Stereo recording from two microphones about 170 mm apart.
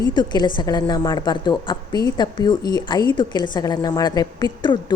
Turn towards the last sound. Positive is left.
turn(degrees=25)  # may be behind; listen again after turning